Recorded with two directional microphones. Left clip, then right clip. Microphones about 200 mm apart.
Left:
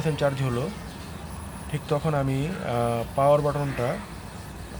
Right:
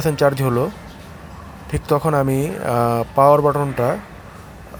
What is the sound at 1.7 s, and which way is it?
Speech, 40° right (ahead or behind).